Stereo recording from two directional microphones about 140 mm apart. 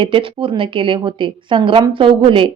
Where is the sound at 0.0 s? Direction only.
40° right (ahead or behind).